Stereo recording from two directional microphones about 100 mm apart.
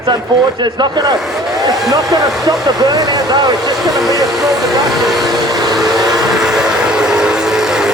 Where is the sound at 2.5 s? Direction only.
40° right (ahead or behind).